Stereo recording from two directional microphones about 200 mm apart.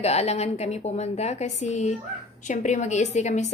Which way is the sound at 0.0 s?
35° left (ahead or behind).